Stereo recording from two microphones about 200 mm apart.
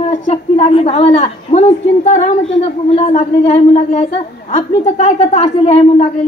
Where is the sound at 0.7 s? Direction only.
30° left (ahead or behind).